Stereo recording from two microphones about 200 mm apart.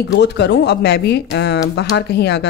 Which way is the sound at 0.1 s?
60° left (ahead or behind).